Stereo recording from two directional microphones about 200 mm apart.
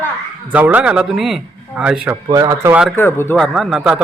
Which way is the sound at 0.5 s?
10° right (ahead or behind).